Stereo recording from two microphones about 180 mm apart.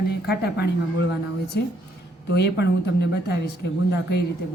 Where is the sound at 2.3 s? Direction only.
65° left (ahead or behind).